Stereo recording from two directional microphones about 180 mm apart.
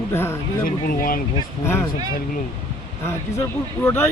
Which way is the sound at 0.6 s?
50° left (ahead or behind).